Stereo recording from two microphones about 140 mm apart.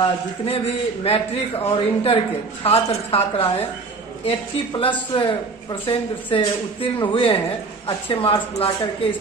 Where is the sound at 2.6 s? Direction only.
45° left (ahead or behind).